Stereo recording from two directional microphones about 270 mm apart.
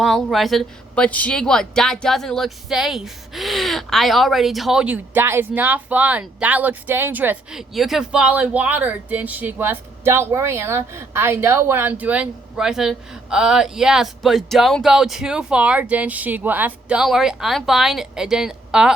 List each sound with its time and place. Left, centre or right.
0.0 s speech: centre